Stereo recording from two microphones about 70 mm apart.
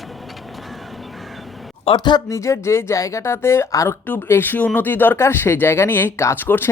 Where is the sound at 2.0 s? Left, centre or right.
Left.